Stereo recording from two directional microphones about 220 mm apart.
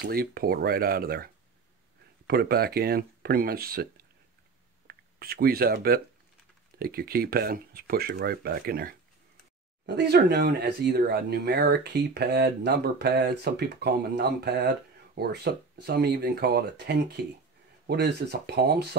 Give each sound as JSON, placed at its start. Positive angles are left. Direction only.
{"t": 0.0, "sound": "speech", "side_deg": -45}